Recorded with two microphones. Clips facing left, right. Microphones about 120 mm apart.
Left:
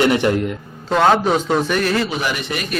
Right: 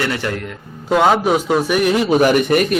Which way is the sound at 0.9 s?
10° right (ahead or behind).